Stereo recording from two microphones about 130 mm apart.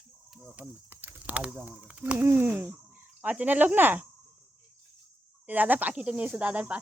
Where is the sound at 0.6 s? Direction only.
15° right (ahead or behind).